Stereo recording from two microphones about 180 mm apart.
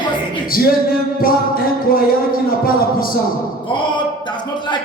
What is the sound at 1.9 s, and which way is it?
Speech, 55° left (ahead or behind).